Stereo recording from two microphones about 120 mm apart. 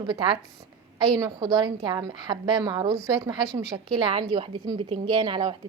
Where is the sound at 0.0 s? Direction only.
40° right (ahead or behind).